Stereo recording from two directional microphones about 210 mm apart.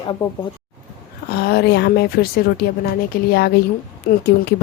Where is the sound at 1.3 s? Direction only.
50° left (ahead or behind).